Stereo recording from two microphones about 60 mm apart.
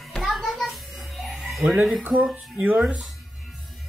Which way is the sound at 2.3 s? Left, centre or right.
Right.